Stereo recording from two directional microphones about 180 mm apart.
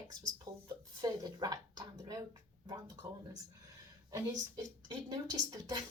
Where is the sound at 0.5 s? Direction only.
20° right (ahead or behind).